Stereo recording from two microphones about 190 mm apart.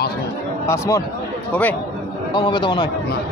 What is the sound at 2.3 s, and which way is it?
Speech, 25° left (ahead or behind).